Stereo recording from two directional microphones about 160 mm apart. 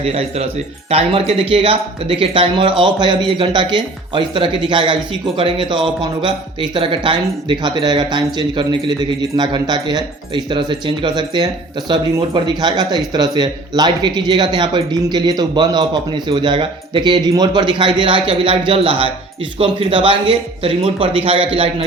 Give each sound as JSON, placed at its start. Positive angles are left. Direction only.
{"t": 0.0, "sound": "speech", "side_deg": -40}